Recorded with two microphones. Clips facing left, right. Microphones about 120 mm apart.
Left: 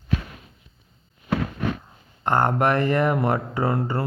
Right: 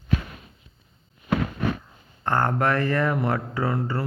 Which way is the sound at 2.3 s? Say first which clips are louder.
Left 2 dB; 20° left (ahead or behind).